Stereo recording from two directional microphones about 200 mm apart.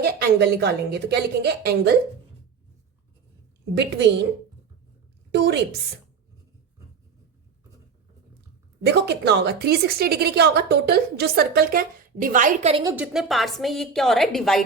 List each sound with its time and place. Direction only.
0.0 s speech: 55° right (ahead or behind)
3.8 s speech: 60° right (ahead or behind)
5.3 s speech: 55° right (ahead or behind)
8.9 s a woman's voice: 55° right (ahead or behind)
12.7 s a woman's voice: 15° right (ahead or behind)
13.1 s a woman's voice: centre (ahead or behind)